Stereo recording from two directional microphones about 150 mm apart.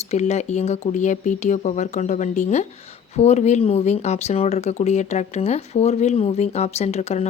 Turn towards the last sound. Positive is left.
turn(degrees=45)  # may be behind; listen again after turning